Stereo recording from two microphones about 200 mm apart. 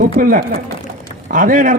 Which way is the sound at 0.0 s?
45° right (ahead or behind).